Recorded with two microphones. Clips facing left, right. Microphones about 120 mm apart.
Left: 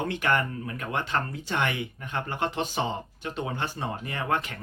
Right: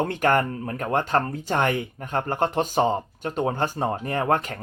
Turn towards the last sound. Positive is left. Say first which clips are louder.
# right 6 dB
turn(degrees=-45)  # may be behind; listen again after turning